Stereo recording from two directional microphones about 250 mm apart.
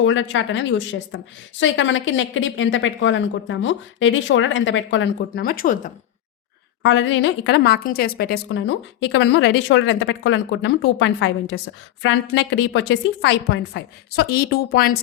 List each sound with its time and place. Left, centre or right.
0.0 s a woman's voice: left
6.8 s a woman's voice: left